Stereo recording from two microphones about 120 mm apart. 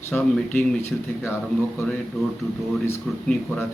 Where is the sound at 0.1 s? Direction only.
15° left (ahead or behind).